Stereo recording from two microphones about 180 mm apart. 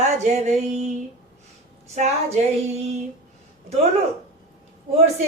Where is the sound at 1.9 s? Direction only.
35° right (ahead or behind).